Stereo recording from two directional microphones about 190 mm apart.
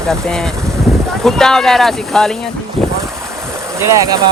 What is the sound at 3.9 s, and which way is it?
Speech, 20° right (ahead or behind).